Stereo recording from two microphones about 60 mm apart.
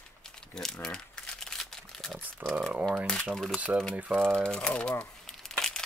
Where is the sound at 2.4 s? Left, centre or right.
Right.